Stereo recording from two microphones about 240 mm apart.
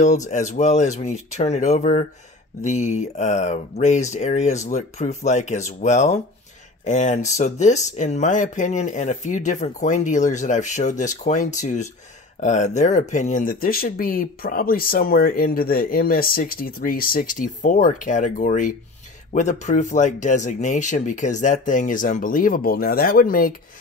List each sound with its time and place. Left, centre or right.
0.0 s speech: left